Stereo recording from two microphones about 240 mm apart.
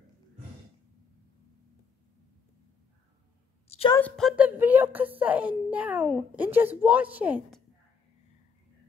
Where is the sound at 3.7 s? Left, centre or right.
Left.